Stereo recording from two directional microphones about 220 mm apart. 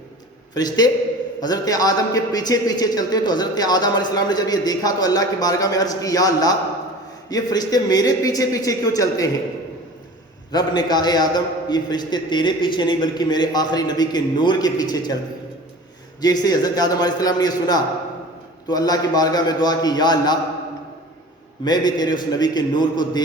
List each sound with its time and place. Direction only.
0.5 s a man's voice: 20° left (ahead or behind)
10.5 s a man's voice: 20° left (ahead or behind)
16.2 s a man's voice: 15° left (ahead or behind)
21.6 s a man's voice: 20° left (ahead or behind)